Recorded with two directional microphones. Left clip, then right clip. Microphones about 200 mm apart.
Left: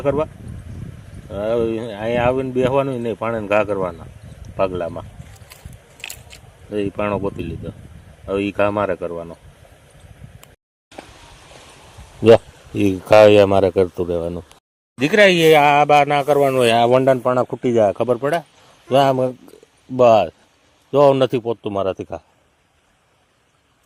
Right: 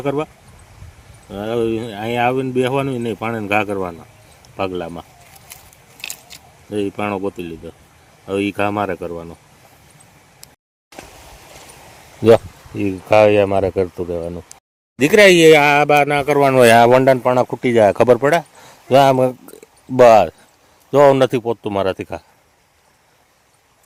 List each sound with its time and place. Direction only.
0.0 s speech: 10° right (ahead or behind)
1.3 s speech: 10° right (ahead or behind)
6.9 s speech: 15° right (ahead or behind)
12.7 s speech: 15° left (ahead or behind)
14.9 s speech: 25° right (ahead or behind); by 16.9 s 50° right (ahead or behind)
17.1 s speech: 15° right (ahead or behind)
17.9 s speech: 35° right (ahead or behind)
18.9 s speech: 15° right (ahead or behind)